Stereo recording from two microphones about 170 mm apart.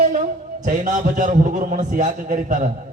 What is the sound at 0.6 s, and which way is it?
A man's voice, 50° right (ahead or behind).